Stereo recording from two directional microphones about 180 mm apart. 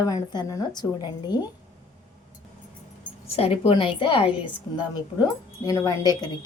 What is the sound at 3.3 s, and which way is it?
Speech, 35° left (ahead or behind).